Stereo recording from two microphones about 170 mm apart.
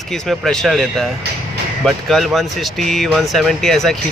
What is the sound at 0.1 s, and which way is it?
Speech, centre (ahead or behind).